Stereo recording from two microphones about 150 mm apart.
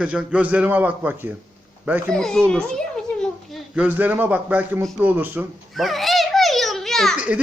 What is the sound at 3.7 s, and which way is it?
A man's voice, 10° right (ahead or behind).